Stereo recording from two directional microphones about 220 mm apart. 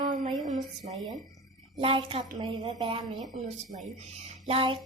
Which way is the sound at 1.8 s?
25° right (ahead or behind).